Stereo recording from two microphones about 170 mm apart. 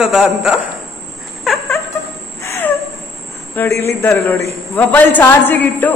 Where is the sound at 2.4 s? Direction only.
15° left (ahead or behind).